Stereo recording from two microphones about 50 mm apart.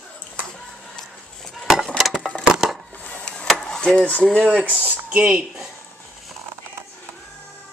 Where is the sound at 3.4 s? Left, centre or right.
Centre.